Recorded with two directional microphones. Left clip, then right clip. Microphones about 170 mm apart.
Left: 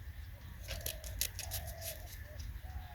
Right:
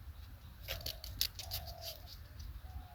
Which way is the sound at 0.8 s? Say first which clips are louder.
Right 3 dB; 5° left (ahead or behind).